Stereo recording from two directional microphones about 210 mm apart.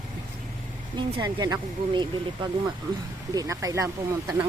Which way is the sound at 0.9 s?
20° right (ahead or behind).